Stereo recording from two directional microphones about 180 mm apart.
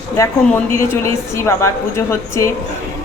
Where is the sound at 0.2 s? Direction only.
15° left (ahead or behind).